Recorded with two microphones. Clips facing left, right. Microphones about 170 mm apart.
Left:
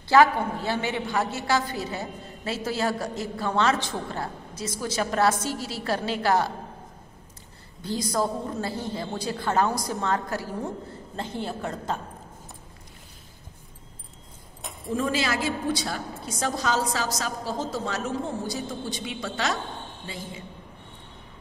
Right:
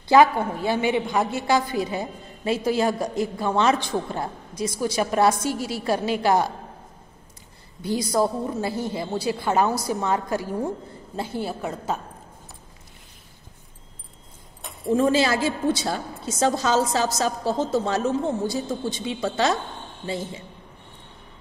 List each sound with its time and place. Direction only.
0.1 s a woman's voice: 15° right (ahead or behind)
7.8 s a woman's voice: 10° right (ahead or behind)
14.9 s a woman's voice: 30° right (ahead or behind)